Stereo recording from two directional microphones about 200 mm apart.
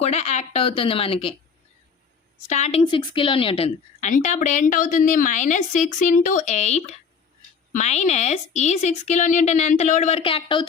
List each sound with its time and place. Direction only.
0.0 s speech: 30° left (ahead or behind)
2.5 s a woman's voice: 35° left (ahead or behind)